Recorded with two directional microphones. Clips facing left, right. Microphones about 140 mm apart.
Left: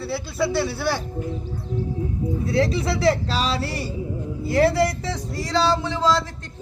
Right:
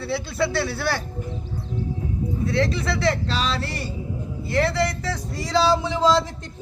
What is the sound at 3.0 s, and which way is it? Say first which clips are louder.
Speech: left 3 dB; 35° left (ahead or behind).